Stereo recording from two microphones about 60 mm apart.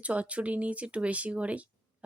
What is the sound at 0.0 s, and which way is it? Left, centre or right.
Speech, right.